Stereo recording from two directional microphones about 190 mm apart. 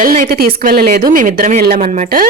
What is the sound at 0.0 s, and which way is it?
Speech, 45° right (ahead or behind).